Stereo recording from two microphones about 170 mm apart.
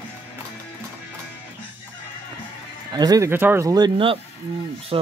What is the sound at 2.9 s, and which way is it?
Speech, 25° right (ahead or behind).